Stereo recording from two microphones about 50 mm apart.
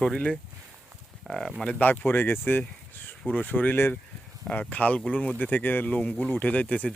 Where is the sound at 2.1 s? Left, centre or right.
Left.